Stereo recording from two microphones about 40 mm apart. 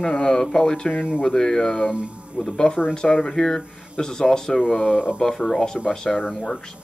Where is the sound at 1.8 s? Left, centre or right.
Right.